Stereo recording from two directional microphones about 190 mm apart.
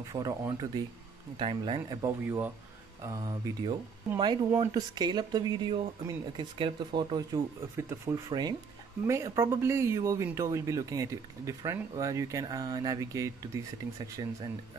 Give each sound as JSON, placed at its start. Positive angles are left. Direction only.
{"t": 0.1, "sound": "speech", "side_deg": -20}